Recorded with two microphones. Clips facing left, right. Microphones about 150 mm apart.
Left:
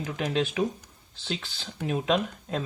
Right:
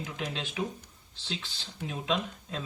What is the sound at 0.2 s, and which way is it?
Speech, 60° left (ahead or behind).